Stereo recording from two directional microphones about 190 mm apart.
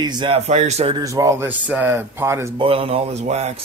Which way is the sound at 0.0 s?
25° right (ahead or behind).